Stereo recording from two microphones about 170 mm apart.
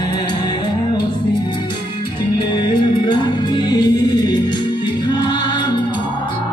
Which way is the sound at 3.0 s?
25° left (ahead or behind).